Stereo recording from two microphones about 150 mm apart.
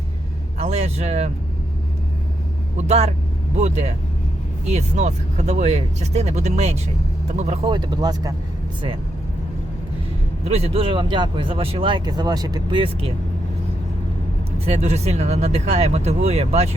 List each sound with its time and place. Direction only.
0.6 s speech: 45° right (ahead or behind)
2.7 s speech: 50° right (ahead or behind)
7.6 s speech: 30° right (ahead or behind)
10.5 s speech: 40° right (ahead or behind)
14.7 s speech: 45° right (ahead or behind)